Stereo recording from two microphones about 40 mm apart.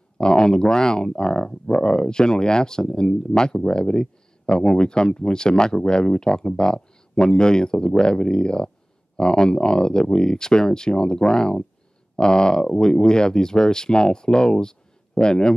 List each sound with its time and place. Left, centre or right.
0.2 s speech: centre